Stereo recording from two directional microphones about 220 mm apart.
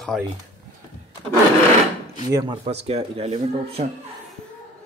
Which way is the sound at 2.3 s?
20° right (ahead or behind).